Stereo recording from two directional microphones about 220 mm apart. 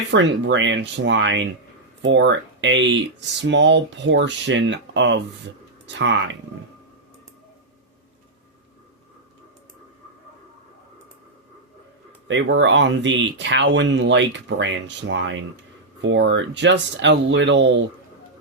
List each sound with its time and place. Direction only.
0.1 s speech: 55° right (ahead or behind)
12.3 s speech: 55° right (ahead or behind)